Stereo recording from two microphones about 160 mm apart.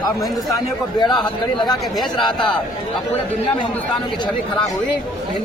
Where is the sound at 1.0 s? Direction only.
30° left (ahead or behind).